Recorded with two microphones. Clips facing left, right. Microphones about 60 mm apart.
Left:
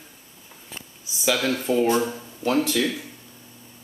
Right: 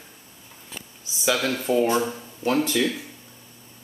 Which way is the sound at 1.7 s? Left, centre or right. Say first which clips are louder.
Right 1 dB; right.